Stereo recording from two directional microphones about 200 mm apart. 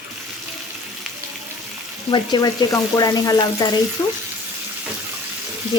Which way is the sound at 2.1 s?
20° left (ahead or behind).